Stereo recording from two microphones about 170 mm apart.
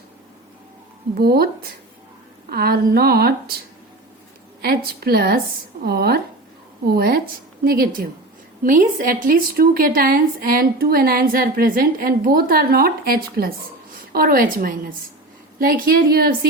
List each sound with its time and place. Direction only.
1.1 s a woman's voice: 65° right (ahead or behind)
2.5 s a woman's voice: 65° right (ahead or behind)
4.6 s a woman's voice: 65° right (ahead or behind)